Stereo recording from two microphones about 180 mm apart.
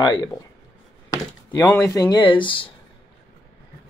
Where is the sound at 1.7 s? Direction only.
15° left (ahead or behind).